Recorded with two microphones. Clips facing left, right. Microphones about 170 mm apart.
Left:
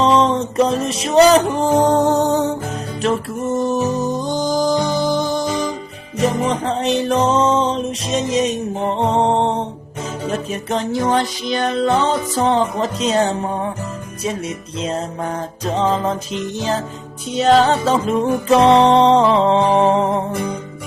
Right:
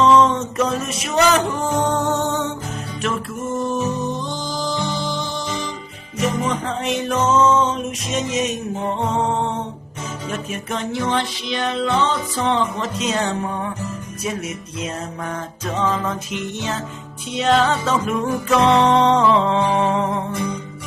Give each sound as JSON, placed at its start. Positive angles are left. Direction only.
{"t": 0.0, "sound": "a sound", "side_deg": 30}
{"t": 1.5, "sound": "music", "side_deg": 35}
{"t": 6.1, "sound": "music", "side_deg": 35}
{"t": 15.6, "sound": "music", "side_deg": 35}